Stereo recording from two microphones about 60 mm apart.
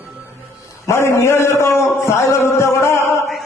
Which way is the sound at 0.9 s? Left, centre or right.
Left.